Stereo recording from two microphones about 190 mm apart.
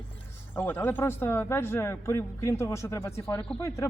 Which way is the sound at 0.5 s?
10° left (ahead or behind).